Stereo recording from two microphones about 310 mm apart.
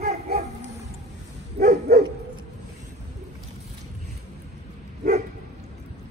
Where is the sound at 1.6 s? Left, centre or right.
Right.